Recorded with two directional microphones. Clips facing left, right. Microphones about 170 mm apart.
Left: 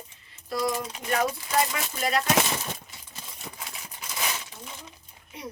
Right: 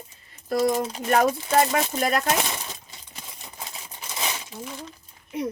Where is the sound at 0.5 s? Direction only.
50° right (ahead or behind).